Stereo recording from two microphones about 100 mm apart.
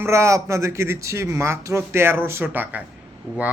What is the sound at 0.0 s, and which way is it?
Speech, 30° right (ahead or behind).